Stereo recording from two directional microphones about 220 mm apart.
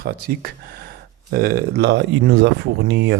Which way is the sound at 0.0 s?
45° right (ahead or behind).